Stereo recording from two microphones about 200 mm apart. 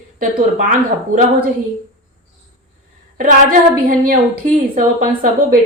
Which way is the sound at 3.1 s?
45° right (ahead or behind).